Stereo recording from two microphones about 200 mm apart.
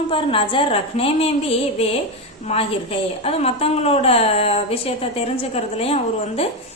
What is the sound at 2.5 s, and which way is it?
A woman's voice, 30° left (ahead or behind).